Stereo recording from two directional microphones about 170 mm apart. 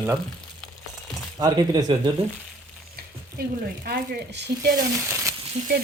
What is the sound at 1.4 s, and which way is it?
Speech, 25° right (ahead or behind).